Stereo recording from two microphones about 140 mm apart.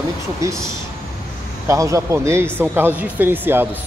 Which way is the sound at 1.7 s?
25° right (ahead or behind).